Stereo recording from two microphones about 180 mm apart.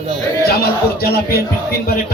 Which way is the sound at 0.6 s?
60° left (ahead or behind).